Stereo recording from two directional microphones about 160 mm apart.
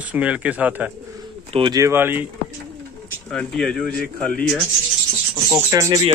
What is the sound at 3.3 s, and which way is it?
Speech, 5° left (ahead or behind).